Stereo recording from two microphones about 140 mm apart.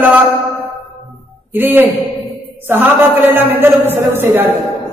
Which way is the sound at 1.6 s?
15° right (ahead or behind).